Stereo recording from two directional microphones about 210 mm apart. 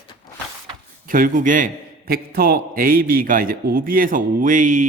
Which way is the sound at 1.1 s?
40° right (ahead or behind).